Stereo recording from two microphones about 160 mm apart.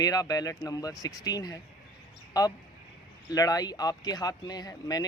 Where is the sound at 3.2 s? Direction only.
25° left (ahead or behind).